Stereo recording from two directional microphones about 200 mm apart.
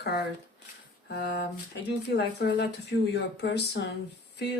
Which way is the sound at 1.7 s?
55° left (ahead or behind).